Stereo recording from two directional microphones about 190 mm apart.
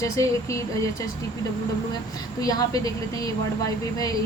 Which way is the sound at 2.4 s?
20° left (ahead or behind).